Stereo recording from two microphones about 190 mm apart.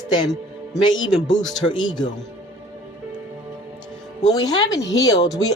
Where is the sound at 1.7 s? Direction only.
25° left (ahead or behind).